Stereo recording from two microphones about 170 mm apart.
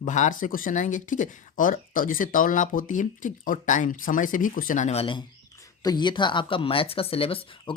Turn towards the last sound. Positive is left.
turn(degrees=30)  # may be behind; listen again after turning